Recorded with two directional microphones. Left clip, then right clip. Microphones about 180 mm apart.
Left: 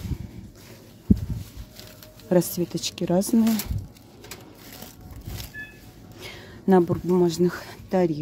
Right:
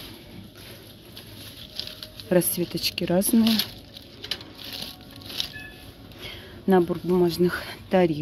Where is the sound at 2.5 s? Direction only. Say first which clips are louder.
Right 2 dB; 20° left (ahead or behind).